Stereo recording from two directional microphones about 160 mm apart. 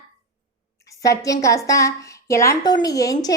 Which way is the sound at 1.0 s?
20° left (ahead or behind).